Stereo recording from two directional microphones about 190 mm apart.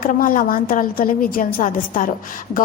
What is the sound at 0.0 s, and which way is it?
A woman's voice, 45° left (ahead or behind).